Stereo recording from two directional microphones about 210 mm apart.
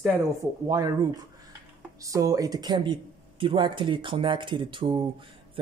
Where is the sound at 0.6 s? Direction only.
15° right (ahead or behind).